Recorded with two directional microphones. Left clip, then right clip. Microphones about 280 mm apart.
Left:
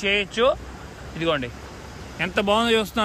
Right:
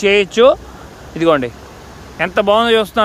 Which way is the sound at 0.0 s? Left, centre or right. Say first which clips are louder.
Right 10 dB; right.